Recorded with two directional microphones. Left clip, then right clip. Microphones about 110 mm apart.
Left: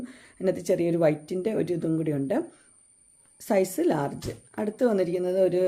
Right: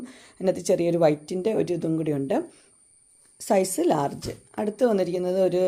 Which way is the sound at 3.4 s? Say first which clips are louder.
Right 2 dB; 20° right (ahead or behind).